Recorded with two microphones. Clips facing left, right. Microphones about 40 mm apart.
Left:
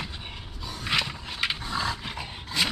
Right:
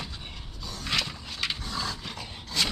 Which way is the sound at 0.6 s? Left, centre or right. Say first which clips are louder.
Left 3 dB; centre.